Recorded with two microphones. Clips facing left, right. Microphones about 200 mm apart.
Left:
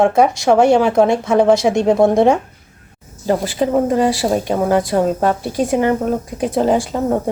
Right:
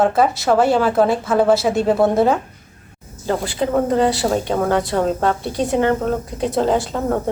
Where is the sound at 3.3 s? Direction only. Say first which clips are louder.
Left 3 dB; 15° left (ahead or behind).